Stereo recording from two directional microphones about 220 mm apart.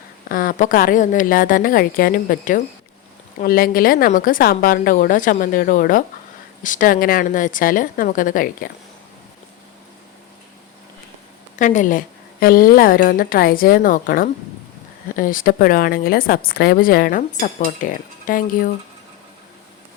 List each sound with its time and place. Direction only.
0.3 s a woman's voice: 40° left (ahead or behind)
11.5 s a woman's voice: 35° left (ahead or behind)